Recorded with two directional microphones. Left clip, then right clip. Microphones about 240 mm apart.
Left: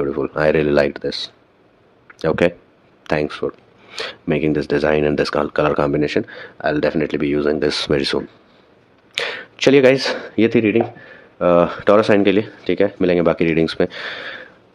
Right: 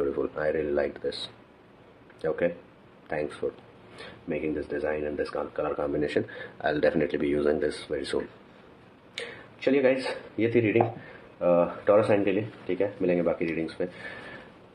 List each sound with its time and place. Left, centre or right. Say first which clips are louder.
0.0 s a sound: left 7 dB; left
0.4 s speech: left 14 dB; left
4.0 s speech: left 12 dB; left
9.1 s speech: left 15 dB; left